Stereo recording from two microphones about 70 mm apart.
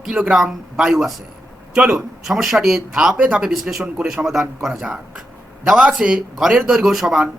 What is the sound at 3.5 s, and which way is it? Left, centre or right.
A man's voice, centre.